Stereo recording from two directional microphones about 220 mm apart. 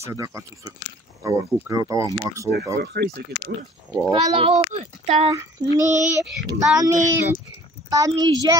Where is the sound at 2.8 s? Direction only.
50° right (ahead or behind).